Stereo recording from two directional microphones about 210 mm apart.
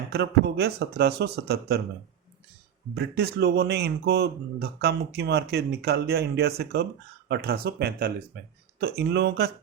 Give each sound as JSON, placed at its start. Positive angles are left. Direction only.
{"t": 0.1, "sound": "speech", "side_deg": -50}
{"t": 2.9, "sound": "speech", "side_deg": -50}